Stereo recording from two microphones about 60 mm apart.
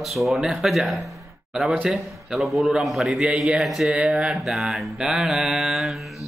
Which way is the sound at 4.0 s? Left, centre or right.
Centre.